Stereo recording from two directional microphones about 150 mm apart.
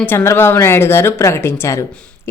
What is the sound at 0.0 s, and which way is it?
Speech, 15° left (ahead or behind).